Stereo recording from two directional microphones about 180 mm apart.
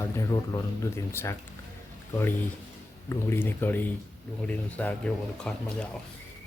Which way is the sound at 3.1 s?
10° left (ahead or behind).